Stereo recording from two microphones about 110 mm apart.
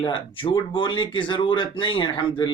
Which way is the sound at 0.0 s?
50° left (ahead or behind).